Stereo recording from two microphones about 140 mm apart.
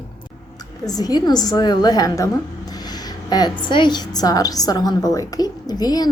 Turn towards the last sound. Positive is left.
turn(degrees=30)  # may be behind; listen again after turning